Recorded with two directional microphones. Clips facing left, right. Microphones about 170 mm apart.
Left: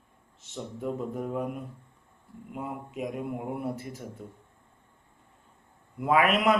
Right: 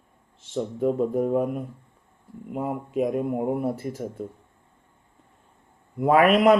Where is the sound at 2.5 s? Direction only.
50° right (ahead or behind).